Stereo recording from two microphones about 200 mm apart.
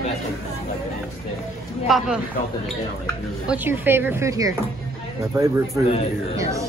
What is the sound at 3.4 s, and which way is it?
Speech, 10° right (ahead or behind).